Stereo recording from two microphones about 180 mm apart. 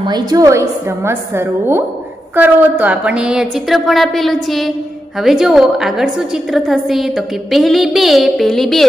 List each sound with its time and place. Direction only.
0.0 s a woman's voice: 20° right (ahead or behind); by 8.8 s centre (ahead or behind)